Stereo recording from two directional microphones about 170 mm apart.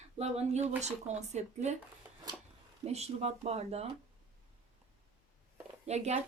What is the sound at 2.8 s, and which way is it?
A woman's voice, 40° right (ahead or behind).